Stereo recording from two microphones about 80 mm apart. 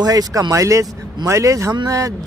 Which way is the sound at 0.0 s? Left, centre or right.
Right.